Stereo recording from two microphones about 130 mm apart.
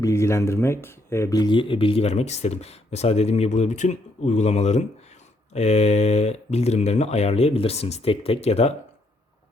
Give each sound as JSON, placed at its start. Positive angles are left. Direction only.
{"t": 0.0, "sound": "speech", "side_deg": 20}